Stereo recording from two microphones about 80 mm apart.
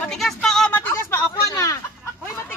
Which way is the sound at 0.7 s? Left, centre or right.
Left.